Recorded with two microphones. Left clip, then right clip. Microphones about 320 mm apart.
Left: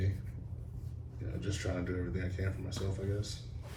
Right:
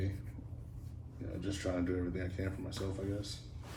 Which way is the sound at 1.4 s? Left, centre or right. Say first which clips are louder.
Right 2 dB; right.